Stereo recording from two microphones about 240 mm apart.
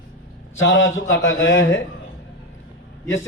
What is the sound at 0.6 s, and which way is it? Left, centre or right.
A man's voice, left.